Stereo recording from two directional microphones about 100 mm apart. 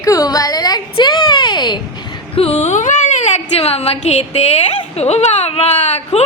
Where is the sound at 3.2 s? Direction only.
90° left.